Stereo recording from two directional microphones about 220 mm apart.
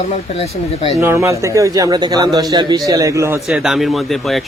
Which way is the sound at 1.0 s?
10° right (ahead or behind).